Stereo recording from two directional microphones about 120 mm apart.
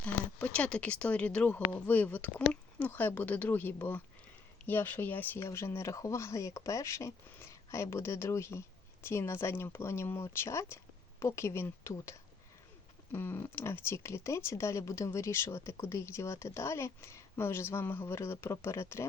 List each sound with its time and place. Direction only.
0.0 s speech: 10° left (ahead or behind)